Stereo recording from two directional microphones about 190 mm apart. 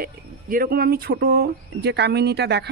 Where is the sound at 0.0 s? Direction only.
50° right (ahead or behind).